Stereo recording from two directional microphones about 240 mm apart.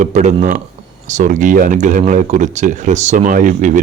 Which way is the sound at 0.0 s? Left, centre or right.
Right.